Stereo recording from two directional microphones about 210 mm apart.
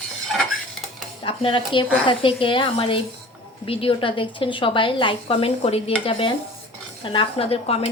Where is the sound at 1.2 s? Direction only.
25° left (ahead or behind).